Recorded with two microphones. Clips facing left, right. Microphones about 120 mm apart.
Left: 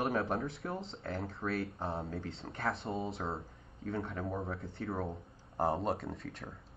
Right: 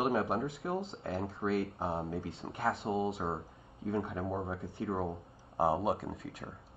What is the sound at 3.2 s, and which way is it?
Speech, 30° right (ahead or behind).